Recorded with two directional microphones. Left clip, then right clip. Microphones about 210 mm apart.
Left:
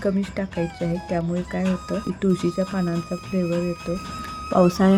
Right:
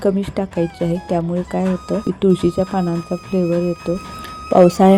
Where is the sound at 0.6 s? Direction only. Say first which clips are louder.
Right 6 dB; centre (ahead or behind).